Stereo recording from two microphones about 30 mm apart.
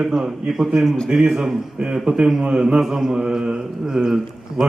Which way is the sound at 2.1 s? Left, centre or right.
Right.